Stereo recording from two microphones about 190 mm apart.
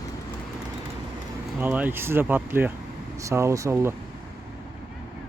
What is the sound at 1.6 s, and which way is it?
Speech, 10° right (ahead or behind).